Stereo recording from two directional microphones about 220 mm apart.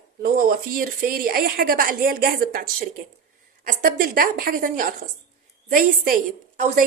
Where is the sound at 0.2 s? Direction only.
40° right (ahead or behind).